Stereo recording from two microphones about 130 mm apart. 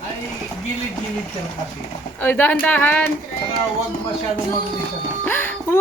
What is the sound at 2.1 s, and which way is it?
Speech, 10° left (ahead or behind).